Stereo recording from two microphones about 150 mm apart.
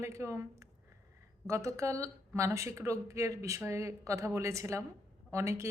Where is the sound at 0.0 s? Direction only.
20° right (ahead or behind).